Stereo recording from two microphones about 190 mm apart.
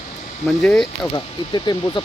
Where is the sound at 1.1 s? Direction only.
20° left (ahead or behind).